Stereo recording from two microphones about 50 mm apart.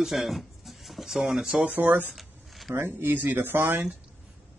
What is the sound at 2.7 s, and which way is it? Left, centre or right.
Speech, right.